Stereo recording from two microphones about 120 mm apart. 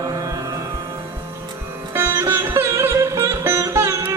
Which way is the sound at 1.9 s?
20° right (ahead or behind).